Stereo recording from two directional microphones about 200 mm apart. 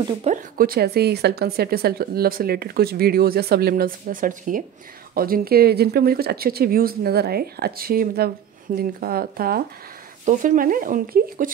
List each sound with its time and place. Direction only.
0.2 s speech: 40° right (ahead or behind)
10.2 s speech: 40° right (ahead or behind)